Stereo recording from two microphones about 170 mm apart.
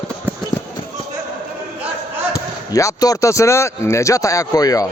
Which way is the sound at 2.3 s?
20° left (ahead or behind).